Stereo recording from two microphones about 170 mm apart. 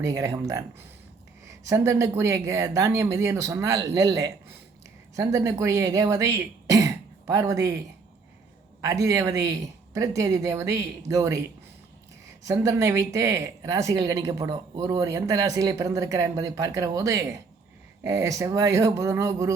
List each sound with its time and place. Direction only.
0.0 s speech: 20° right (ahead or behind)
1.6 s speech: 15° right (ahead or behind)
8.8 s speech: 20° right (ahead or behind)